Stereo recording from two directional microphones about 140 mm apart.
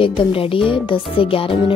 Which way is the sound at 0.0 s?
40° left (ahead or behind).